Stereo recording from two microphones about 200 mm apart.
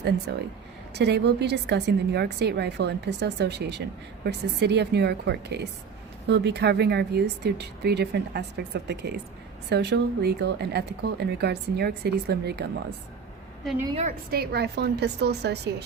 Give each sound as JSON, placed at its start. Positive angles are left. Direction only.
{"t": 0.3, "sound": "speech", "side_deg": -55}
{"t": 14.3, "sound": "speech", "side_deg": -50}